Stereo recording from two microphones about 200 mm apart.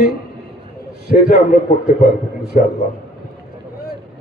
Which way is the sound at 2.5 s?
40° left (ahead or behind).